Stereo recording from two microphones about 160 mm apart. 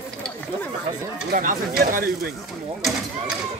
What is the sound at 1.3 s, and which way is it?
Speech, 65° right (ahead or behind).